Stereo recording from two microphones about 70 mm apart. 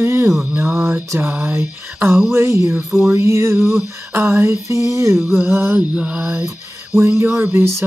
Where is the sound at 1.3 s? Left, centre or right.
Right.